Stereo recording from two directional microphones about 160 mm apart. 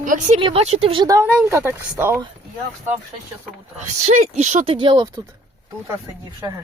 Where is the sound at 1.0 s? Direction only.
20° right (ahead or behind).